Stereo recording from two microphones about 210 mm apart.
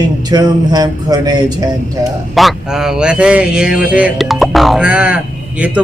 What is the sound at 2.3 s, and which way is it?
A man's voice, centre (ahead or behind).